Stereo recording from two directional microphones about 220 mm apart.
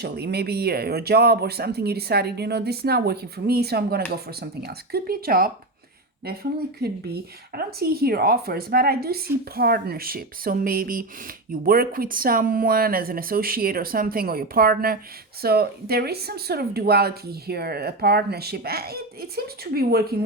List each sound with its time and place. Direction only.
0.0 s speech: 45° right (ahead or behind)